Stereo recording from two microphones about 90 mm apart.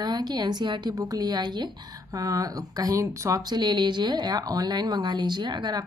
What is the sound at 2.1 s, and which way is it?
Speech, 40° right (ahead or behind).